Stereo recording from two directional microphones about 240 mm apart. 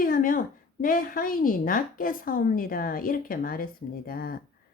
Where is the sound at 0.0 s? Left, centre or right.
Left.